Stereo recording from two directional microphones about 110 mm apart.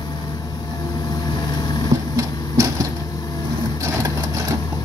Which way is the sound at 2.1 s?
30° right (ahead or behind).